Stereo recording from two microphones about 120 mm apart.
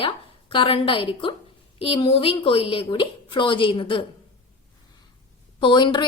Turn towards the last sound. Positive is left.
turn(degrees=40)  # may be behind; listen again after turning